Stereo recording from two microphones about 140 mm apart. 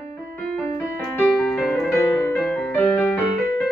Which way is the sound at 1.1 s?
10° left (ahead or behind).